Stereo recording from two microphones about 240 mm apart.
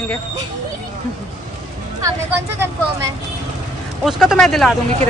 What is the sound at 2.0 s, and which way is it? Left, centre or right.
Speech, centre.